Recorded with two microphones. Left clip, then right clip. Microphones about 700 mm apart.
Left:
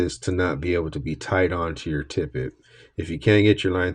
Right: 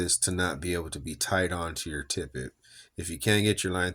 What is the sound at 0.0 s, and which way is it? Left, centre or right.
Speech, right.